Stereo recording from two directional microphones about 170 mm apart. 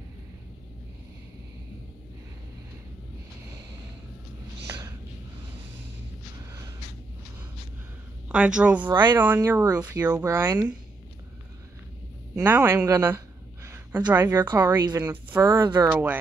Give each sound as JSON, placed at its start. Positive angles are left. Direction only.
{"t": 4.6, "sound": "a sound", "side_deg": -15}
{"t": 8.3, "sound": "speech", "side_deg": -5}
{"t": 12.4, "sound": "speech", "side_deg": -15}
{"t": 14.7, "sound": "speech", "side_deg": -25}
{"t": 15.2, "sound": "speech", "side_deg": -10}
{"t": 15.6, "sound": "speech", "side_deg": -25}
{"t": 15.9, "sound": "speech", "side_deg": -10}